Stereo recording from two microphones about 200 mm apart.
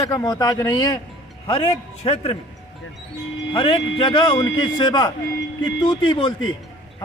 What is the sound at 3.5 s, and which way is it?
A man's voice, 25° left (ahead or behind).